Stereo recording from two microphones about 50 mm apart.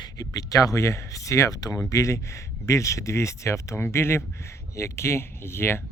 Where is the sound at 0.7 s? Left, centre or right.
Left.